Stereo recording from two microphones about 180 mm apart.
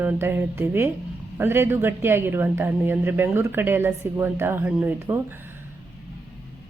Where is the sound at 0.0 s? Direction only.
10° right (ahead or behind).